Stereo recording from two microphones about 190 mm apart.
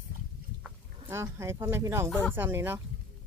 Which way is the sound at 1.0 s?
15° right (ahead or behind).